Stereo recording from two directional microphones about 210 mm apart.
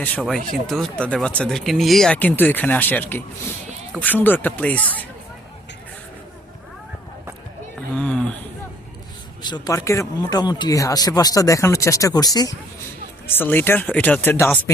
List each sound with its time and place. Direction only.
0.0 s speech: 5° left (ahead or behind)
7.9 s speech: 5° left (ahead or behind)
9.4 s speech: 20° left (ahead or behind)